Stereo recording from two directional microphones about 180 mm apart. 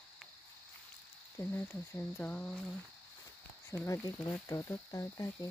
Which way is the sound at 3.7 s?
15° left (ahead or behind).